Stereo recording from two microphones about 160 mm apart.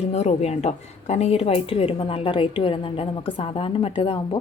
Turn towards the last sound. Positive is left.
turn(degrees=35)  # may be behind; listen again after turning